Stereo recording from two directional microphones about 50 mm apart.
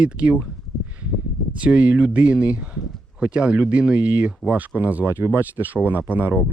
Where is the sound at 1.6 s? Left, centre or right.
Right.